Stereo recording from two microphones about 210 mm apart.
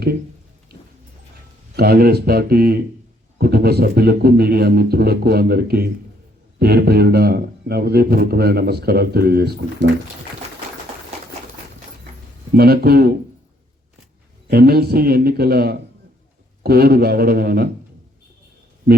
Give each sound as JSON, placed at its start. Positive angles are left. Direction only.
{"t": 1.7, "sound": "speech", "side_deg": -45}
{"t": 12.5, "sound": "speech", "side_deg": -50}
{"t": 14.4, "sound": "speech", "side_deg": -50}